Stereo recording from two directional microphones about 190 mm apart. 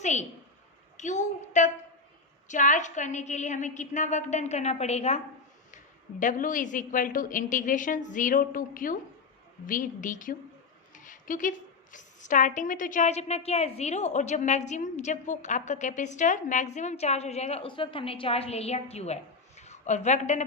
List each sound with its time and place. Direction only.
0.0 s a woman's voice: 40° left (ahead or behind)